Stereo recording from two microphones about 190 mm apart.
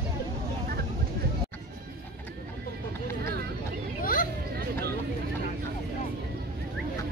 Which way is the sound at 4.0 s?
45° left (ahead or behind).